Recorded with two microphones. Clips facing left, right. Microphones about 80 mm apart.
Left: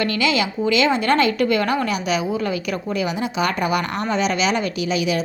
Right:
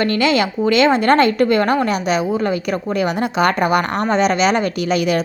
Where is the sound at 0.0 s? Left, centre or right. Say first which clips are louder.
Right 4 dB; right.